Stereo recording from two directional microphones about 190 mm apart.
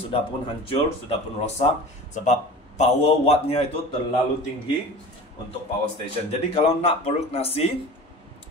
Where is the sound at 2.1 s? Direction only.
40° left (ahead or behind).